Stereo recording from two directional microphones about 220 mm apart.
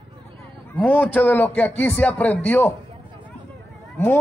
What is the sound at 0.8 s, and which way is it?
A man's voice, 10° left (ahead or behind).